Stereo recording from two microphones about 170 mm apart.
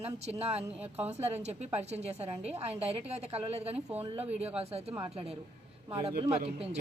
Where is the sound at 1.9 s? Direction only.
40° right (ahead or behind).